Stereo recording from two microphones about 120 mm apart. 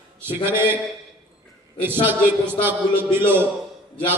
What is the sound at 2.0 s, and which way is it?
A man's voice, 15° right (ahead or behind).